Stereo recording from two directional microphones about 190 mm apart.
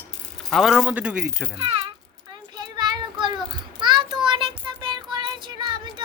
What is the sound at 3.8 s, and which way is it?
Child singing, 25° right (ahead or behind).